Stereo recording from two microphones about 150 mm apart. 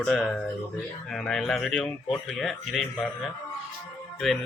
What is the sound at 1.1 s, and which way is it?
A man's voice, 5° left (ahead or behind).